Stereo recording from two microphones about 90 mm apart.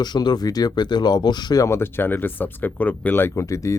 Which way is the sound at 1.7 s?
25° left (ahead or behind).